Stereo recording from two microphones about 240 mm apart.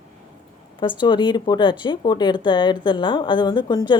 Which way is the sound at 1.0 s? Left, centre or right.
Centre.